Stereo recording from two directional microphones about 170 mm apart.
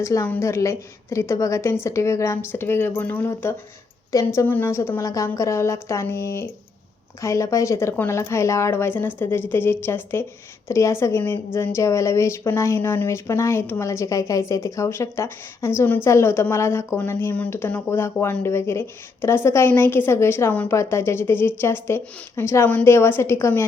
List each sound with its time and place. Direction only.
0.0 s speech: 15° left (ahead or behind)